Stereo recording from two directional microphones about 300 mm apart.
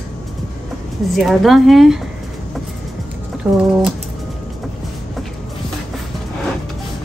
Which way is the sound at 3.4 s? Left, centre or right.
Centre.